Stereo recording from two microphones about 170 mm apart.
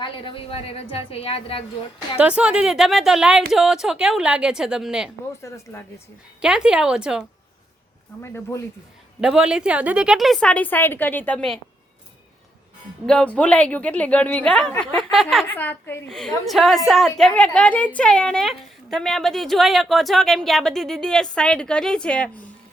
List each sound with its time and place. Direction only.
0.0 s a woman's voice: 30° left (ahead or behind)
2.1 s a woman's voice: 5° right (ahead or behind)
5.4 s a woman's voice: 15° left (ahead or behind)
6.4 s a woman's voice: 5° right (ahead or behind)
8.2 s a woman's voice: 15° left (ahead or behind)
9.2 s a woman's voice: 5° right (ahead or behind)
13.1 s a woman's voice: 5° left (ahead or behind)
15.5 s a woman's voice: 10° left (ahead or behind)
16.0 s a woman's voice: centre (ahead or behind)